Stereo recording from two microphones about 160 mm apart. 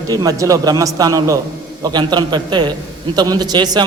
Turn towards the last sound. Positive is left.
turn(degrees=-25)  # may be behind; listen again after turning